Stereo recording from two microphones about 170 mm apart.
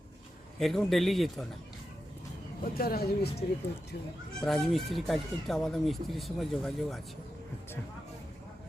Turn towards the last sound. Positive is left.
turn(degrees=0)  # may be behind; listen again after turning